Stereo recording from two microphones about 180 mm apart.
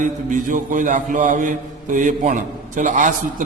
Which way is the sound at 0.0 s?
45° right (ahead or behind).